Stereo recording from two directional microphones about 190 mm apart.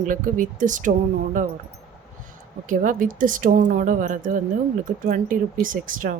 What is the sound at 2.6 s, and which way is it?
Speech, 45° right (ahead or behind).